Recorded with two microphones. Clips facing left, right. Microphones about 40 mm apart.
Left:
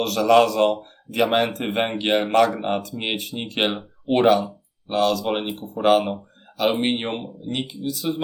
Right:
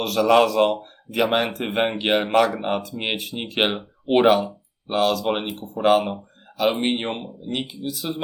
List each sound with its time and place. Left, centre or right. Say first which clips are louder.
0.0 s speech: left 1 dB; centre